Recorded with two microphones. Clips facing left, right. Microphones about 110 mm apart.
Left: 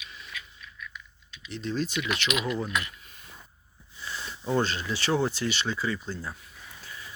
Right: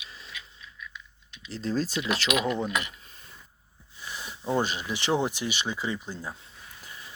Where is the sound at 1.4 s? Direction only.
35° right (ahead or behind).